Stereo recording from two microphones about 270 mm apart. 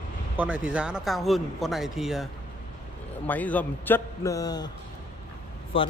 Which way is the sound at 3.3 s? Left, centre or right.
Centre.